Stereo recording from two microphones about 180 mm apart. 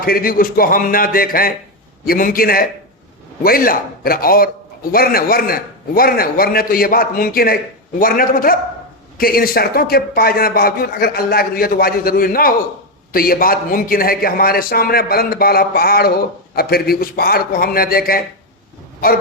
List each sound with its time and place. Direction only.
0.0 s a man's voice: 55° left (ahead or behind)